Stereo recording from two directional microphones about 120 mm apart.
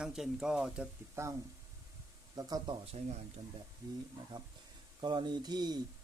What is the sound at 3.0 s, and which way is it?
Speech, 60° right (ahead or behind).